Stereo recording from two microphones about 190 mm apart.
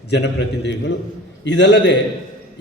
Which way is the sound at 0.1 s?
65° left (ahead or behind).